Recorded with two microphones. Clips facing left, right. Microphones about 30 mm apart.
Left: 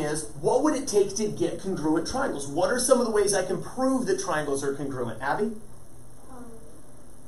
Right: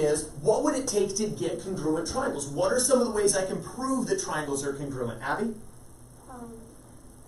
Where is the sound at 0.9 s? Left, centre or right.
Centre.